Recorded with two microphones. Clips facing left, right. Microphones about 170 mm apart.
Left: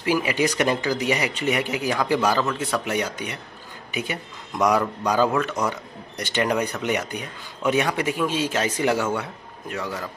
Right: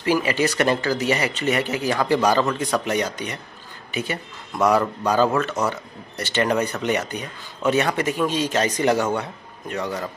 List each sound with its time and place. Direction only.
0.0 s a man's voice: 10° left (ahead or behind)